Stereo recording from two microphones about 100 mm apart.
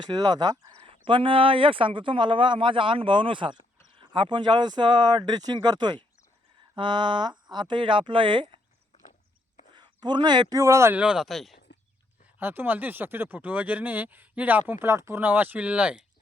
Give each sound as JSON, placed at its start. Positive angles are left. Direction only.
{"t": 0.0, "sound": "speech", "side_deg": -45}
{"t": 0.8, "sound": "speech", "side_deg": -65}
{"t": 9.7, "sound": "speech", "side_deg": -50}
{"t": 10.6, "sound": "speech", "side_deg": -30}
{"t": 10.9, "sound": "speech", "side_deg": -10}
{"t": 12.4, "sound": "speech", "side_deg": -20}